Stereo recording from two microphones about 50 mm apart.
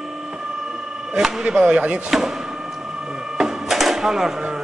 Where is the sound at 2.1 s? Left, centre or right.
Centre.